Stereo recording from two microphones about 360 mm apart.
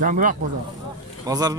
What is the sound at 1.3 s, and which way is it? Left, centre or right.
Speech, centre.